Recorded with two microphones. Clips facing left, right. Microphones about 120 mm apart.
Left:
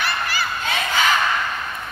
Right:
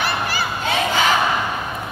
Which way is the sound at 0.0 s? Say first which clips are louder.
Right 2 dB; 15° right (ahead or behind).